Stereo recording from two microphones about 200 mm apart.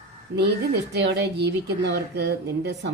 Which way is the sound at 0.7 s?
55° right (ahead or behind).